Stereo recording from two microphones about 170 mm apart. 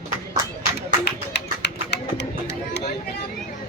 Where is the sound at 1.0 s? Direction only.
80° left.